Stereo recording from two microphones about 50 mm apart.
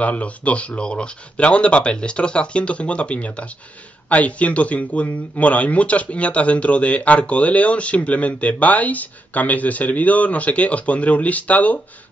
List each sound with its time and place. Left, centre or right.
0.0 s speech: left